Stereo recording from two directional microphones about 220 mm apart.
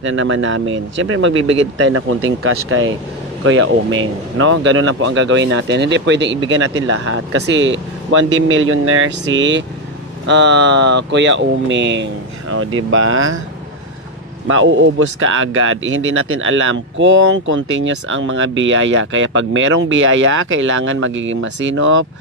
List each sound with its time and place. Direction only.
0.0 s speech: 60° right (ahead or behind)
14.5 s speech: 60° right (ahead or behind)